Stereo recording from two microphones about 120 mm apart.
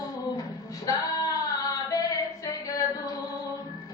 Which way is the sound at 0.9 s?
30° left (ahead or behind).